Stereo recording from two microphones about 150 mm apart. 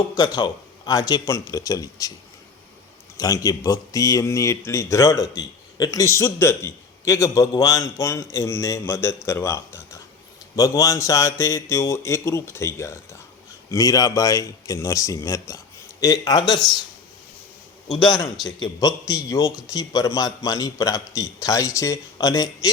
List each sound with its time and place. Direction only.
0.1 s speech: 25° left (ahead or behind)
3.2 s speech: 25° left (ahead or behind)
18.4 s speech: 25° left (ahead or behind)